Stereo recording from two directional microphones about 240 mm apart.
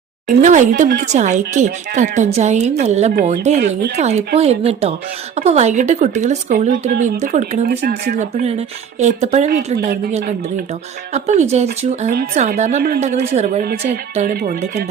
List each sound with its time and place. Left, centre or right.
0.3 s speech: right
9.7 s a woman's voice: right